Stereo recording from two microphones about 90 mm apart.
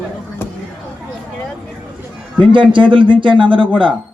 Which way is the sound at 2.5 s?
65° right (ahead or behind).